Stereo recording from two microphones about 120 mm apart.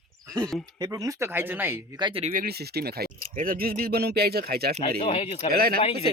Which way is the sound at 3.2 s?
90° right.